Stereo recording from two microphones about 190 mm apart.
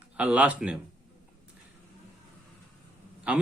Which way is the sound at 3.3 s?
5° right (ahead or behind).